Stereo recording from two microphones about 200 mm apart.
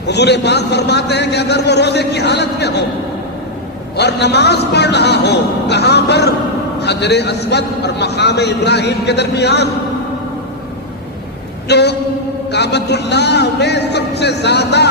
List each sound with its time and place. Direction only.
0.1 s a man's voice: 55° left (ahead or behind)
3.9 s a man's voice: 55° left (ahead or behind)
11.7 s a man's voice: 55° left (ahead or behind)